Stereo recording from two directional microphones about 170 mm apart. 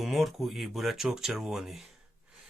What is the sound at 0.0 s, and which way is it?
Speech, centre (ahead or behind).